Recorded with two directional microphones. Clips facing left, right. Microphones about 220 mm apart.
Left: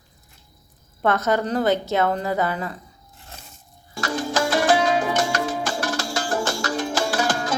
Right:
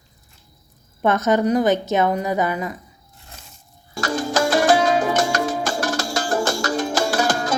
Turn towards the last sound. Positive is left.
turn(degrees=-45)  # may be behind; listen again after turning